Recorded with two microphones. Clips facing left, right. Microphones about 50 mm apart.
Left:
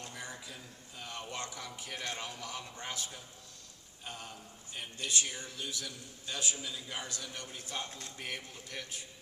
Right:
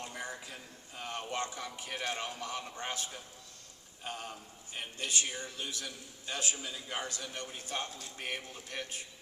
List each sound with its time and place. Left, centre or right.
0.0 s a sound: right
0.4 s a man's voice: right
5.5 s a man's voice: right
7.9 s speech: left
8.2 s a man's voice: right